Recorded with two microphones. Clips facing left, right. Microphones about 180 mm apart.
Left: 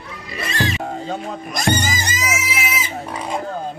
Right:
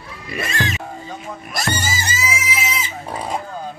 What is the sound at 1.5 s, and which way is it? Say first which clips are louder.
Music: left 4 dB; 20° left (ahead or behind).